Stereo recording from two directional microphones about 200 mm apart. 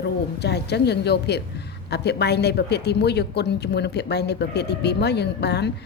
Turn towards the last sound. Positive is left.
turn(degrees=55)  # may be behind; listen again after turning